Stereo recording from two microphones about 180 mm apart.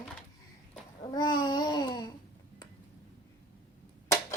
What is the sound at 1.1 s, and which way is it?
Babbling, 25° left (ahead or behind).